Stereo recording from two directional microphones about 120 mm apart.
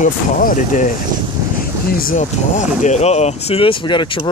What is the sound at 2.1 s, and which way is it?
Speech, 90° left.